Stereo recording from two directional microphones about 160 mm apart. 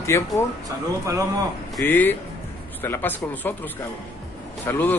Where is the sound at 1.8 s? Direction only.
10° left (ahead or behind).